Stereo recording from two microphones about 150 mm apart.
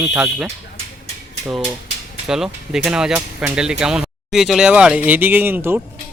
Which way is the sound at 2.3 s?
5° right (ahead or behind).